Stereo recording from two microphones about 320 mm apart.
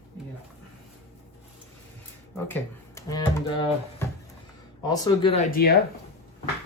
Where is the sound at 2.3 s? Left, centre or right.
Centre; by 5.7 s left.